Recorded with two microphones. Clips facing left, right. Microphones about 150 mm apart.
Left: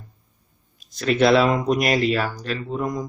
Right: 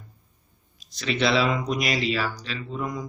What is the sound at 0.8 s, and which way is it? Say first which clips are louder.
Speech: left 7 dB; 50° left (ahead or behind).